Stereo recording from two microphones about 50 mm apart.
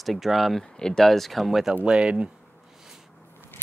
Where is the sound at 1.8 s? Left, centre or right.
Centre.